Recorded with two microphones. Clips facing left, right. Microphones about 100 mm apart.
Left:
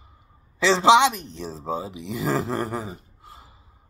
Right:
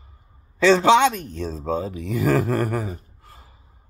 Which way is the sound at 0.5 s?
20° left (ahead or behind).